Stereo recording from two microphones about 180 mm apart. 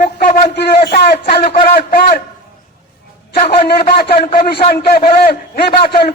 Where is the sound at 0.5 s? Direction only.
65° left (ahead or behind).